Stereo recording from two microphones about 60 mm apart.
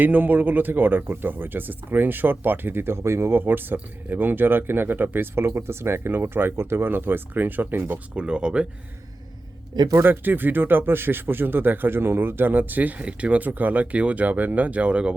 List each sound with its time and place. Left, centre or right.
0.0 s speech: right
8.1 s speech: centre
10.0 s speech: right; by 15.1 s centre